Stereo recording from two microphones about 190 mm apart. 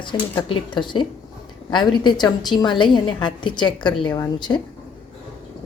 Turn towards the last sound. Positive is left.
turn(degrees=20)  # may be behind; listen again after turning